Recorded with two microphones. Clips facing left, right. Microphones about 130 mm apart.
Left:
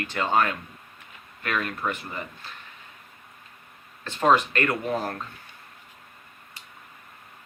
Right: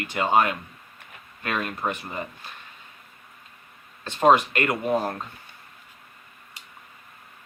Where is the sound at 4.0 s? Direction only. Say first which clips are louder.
Right 3 dB; 20° right (ahead or behind).